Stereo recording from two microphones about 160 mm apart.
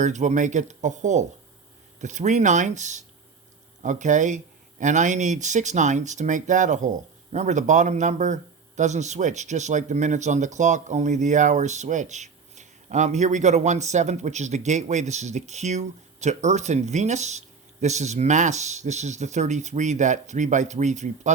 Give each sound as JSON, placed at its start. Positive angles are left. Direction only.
{"t": 0.0, "sound": "a man's voice", "side_deg": -45}